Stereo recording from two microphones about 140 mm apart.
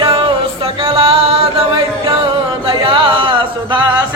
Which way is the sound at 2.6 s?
40° right (ahead or behind).